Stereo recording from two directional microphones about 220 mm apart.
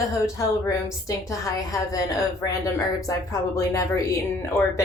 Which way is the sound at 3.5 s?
15° left (ahead or behind).